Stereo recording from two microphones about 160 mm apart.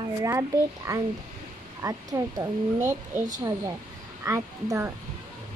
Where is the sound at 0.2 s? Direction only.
20° right (ahead or behind).